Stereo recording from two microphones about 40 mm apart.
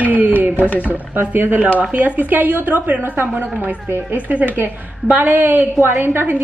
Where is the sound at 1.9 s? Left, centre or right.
Right.